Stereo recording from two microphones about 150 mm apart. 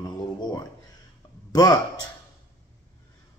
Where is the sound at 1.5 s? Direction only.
25° left (ahead or behind).